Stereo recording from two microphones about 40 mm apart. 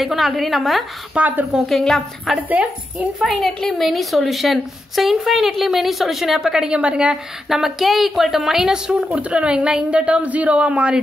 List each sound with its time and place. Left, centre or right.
0.0 s a woman's voice: centre
1.1 s a woman's voice: right
1.7 s a woman's voice: centre
2.6 s a woman's voice: right
3.2 s a woman's voice: centre
6.4 s a woman's voice: centre
7.4 s speech: centre
9.1 s a woman's voice: right